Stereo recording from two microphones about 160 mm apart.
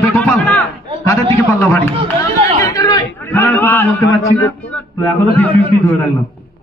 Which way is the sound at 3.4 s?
10° left (ahead or behind).